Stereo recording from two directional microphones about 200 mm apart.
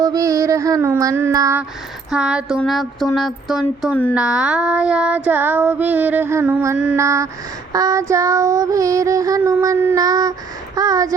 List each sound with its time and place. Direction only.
0.0 s child singing: 15° right (ahead or behind)
2.0 s a sound: 5° right (ahead or behind)
4.1 s child singing: 5° right (ahead or behind)